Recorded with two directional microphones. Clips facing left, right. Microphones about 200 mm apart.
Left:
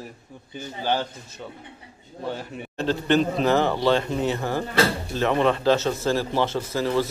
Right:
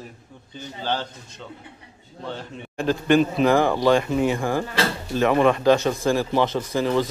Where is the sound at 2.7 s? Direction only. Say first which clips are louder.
Right 3 dB; 10° right (ahead or behind).